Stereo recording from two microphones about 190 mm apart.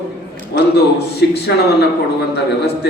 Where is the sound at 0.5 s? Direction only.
60° left (ahead or behind).